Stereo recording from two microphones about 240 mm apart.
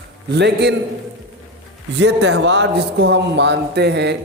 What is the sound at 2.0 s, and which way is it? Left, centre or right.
A man's voice, right.